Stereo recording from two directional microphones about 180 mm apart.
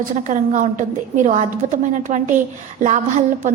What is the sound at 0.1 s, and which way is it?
A woman's voice, 45° right (ahead or behind).